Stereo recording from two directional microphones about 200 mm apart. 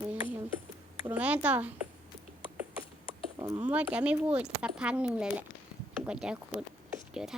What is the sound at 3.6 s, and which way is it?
Speech, 5° right (ahead or behind).